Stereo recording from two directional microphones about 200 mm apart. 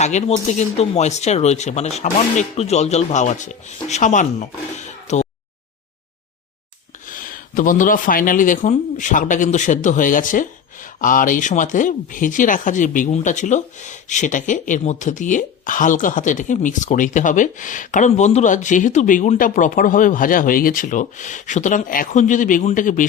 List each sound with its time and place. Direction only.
0.0 s speech: 35° left (ahead or behind)
7.0 s speech: 40° left (ahead or behind)